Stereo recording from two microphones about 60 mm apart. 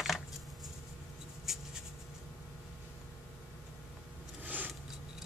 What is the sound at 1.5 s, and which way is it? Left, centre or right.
Writing, centre.